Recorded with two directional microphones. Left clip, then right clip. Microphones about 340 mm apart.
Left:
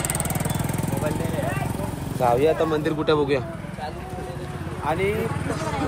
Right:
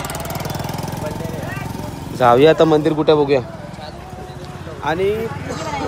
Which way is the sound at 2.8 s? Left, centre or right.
Centre.